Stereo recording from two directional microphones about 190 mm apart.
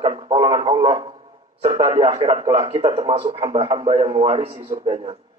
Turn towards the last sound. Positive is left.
turn(degrees=-35)  # may be behind; listen again after turning